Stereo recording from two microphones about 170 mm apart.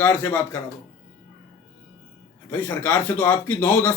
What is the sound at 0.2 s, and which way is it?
Speech, 10° left (ahead or behind).